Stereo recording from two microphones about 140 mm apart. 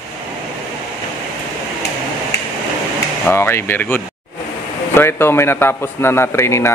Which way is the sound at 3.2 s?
15° left (ahead or behind).